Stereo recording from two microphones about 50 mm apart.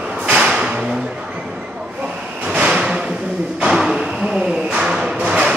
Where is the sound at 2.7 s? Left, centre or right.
Centre.